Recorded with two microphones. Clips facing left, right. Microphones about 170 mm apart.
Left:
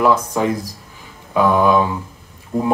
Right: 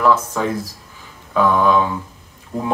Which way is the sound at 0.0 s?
15° left (ahead or behind).